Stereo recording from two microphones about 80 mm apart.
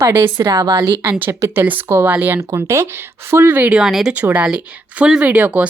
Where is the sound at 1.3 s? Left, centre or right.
Right.